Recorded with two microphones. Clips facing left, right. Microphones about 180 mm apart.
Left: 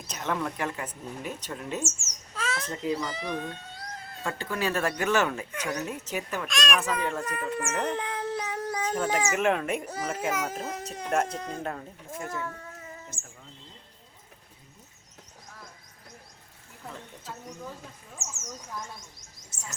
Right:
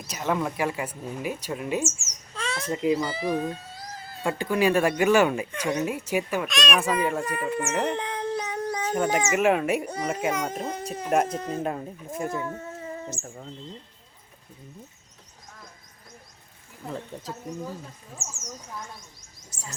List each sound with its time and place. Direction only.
0.1 s speech: 10° right (ahead or behind)
2.3 s bird: 5° left (ahead or behind)
2.6 s speech: 15° right (ahead or behind)
4.4 s speech: 15° right (ahead or behind); by 8.8 s 5° left (ahead or behind)
8.8 s speech: 10° right (ahead or behind)
9.9 s a child's voice: 5° left (ahead or behind)
11.6 s speech: 20° right (ahead or behind); by 13.5 s 45° right (ahead or behind)
18.2 s a child's voice: centre (ahead or behind)
19.5 s bird: 25° left (ahead or behind)